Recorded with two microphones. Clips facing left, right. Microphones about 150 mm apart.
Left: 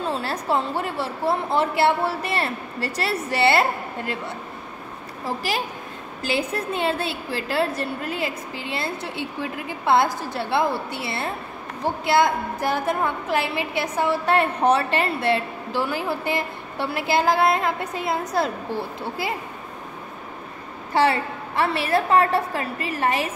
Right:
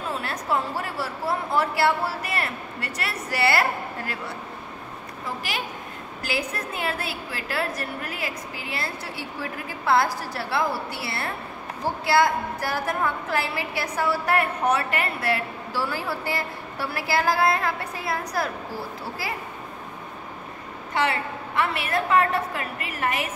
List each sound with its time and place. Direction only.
0.0 s a woman's voice: 30° left (ahead or behind)
5.2 s a woman's voice: 35° left (ahead or behind)
20.9 s a woman's voice: 30° left (ahead or behind)